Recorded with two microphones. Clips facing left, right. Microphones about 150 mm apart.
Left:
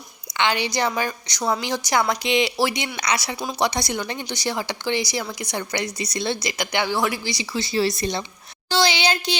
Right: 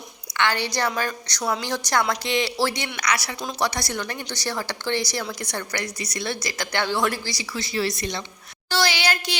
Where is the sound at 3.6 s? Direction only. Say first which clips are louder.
Left 3 dB; 20° left (ahead or behind).